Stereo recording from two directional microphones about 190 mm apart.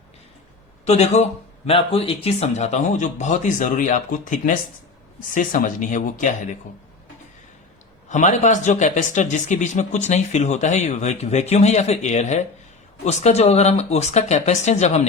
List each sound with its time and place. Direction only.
0.9 s speech: 35° left (ahead or behind)
8.1 s speech: 40° left (ahead or behind)